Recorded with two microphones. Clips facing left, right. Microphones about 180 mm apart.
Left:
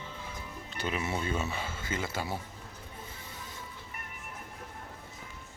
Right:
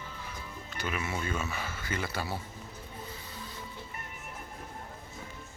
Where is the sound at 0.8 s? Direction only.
30° left (ahead or behind).